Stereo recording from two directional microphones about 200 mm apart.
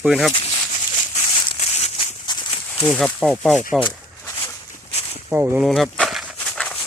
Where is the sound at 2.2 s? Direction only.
20° left (ahead or behind).